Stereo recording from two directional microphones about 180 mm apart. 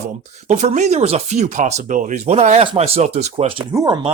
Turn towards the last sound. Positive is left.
turn(degrees=-25)  # may be behind; listen again after turning